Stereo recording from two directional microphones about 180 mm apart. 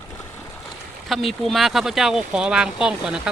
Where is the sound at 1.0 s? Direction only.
Centre (ahead or behind).